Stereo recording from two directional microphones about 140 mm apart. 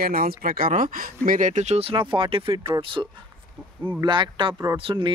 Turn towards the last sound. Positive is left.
turn(degrees=-35)  # may be behind; listen again after turning